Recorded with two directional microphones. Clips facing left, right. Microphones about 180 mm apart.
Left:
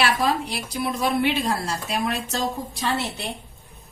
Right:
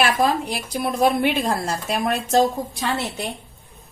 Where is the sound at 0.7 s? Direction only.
45° right (ahead or behind).